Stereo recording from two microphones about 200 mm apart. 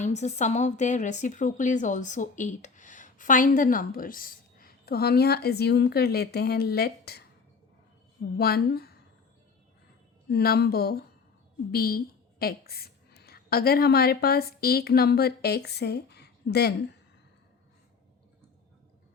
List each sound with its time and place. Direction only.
0.0 s speech: 35° left (ahead or behind); by 7.3 s 50° left (ahead or behind)
8.4 s speech: 50° left (ahead or behind)
10.2 s a woman's voice: 50° left (ahead or behind)